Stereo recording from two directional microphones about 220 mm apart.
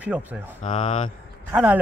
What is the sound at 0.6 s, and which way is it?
Speech, 30° left (ahead or behind).